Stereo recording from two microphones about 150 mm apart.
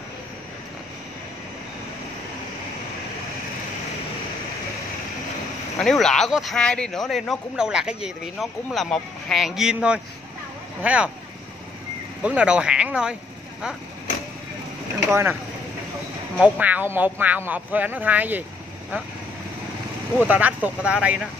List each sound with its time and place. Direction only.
5.8 s speech: 5° left (ahead or behind)
12.2 s speech: 10° right (ahead or behind)
15.0 s speech: 15° right (ahead or behind)
16.3 s speech: 10° right (ahead or behind)
20.2 s speech: 10° right (ahead or behind)